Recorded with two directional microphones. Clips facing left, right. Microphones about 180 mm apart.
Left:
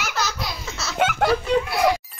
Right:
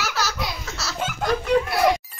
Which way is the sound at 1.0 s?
70° left (ahead or behind).